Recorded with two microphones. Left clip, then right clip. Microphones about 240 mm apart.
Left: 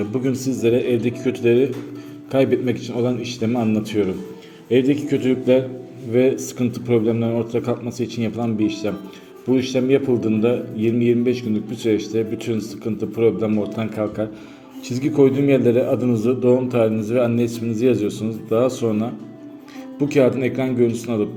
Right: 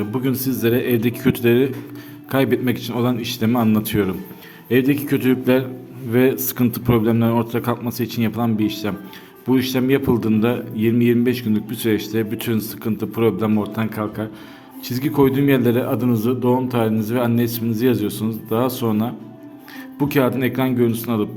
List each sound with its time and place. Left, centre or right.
0.1 s a man's voice: right